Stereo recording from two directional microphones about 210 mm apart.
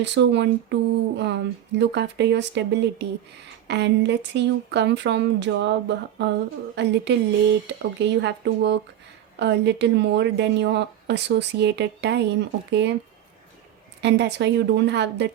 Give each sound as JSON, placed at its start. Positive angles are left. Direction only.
{"t": 0.0, "sound": "a woman's voice", "side_deg": -55}
{"t": 14.0, "sound": "a woman's voice", "side_deg": -55}